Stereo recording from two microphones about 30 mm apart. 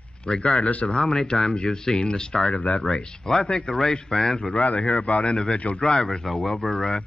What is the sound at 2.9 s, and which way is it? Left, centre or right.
Speech, left.